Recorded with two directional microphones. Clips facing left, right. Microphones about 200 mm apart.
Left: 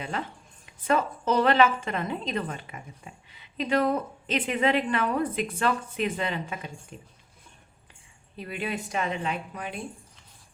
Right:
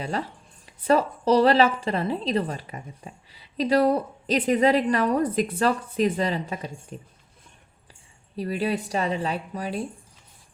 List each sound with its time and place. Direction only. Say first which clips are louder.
0.0 s speech: right 4 dB; 35° right (ahead or behind)
8.4 s speech: right 7 dB; 35° right (ahead or behind)